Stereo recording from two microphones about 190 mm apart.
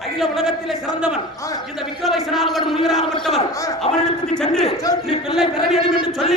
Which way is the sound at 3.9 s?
30° left (ahead or behind).